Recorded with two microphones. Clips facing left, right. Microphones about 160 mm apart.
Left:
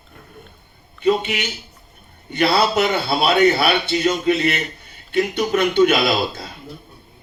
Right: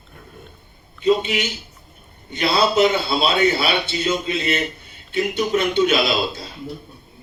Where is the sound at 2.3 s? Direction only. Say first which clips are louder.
Even; 60° left (ahead or behind).